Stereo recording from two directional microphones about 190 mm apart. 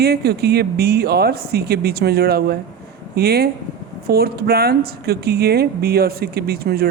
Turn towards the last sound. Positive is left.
turn(degrees=-55)  # may be behind; listen again after turning